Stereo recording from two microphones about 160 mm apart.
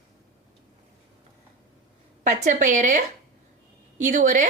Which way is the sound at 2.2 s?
50° right (ahead or behind).